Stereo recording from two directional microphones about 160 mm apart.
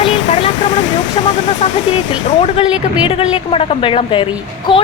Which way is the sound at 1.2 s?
50° left (ahead or behind).